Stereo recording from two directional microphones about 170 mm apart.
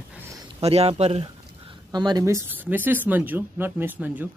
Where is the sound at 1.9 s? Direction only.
25° right (ahead or behind).